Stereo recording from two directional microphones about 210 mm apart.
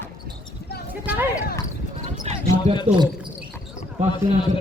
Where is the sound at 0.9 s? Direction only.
10° right (ahead or behind).